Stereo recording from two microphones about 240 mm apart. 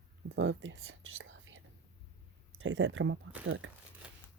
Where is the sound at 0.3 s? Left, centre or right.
Right.